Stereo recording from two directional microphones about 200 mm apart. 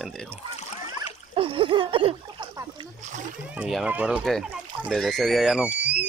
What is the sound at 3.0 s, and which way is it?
Speech, 40° right (ahead or behind).